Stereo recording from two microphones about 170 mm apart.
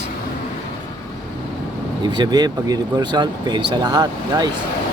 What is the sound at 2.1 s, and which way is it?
Speech, 25° right (ahead or behind).